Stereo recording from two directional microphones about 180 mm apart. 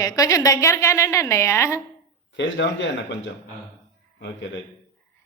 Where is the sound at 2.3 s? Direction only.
85° left.